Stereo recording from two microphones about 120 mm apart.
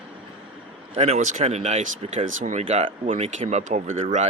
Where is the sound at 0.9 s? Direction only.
60° right (ahead or behind).